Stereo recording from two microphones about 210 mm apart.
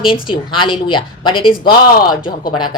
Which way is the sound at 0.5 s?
25° left (ahead or behind).